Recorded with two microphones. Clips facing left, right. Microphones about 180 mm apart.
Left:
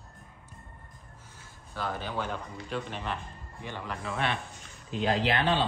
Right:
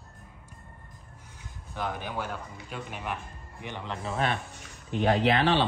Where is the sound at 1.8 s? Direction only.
15° right (ahead or behind).